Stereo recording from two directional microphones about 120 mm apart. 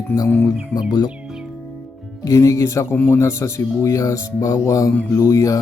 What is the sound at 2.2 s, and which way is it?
Speech, 25° left (ahead or behind).